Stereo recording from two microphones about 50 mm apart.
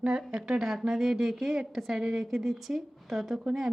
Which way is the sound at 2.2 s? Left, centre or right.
Centre.